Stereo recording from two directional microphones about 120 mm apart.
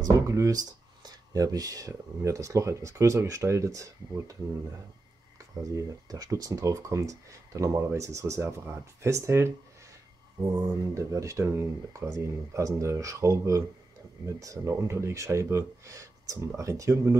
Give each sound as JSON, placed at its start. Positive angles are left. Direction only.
{"t": 0.0, "sound": "speech", "side_deg": -30}
{"t": 5.6, "sound": "speech", "side_deg": -30}